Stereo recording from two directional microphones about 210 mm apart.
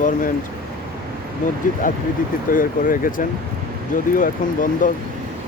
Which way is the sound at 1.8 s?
40° left (ahead or behind).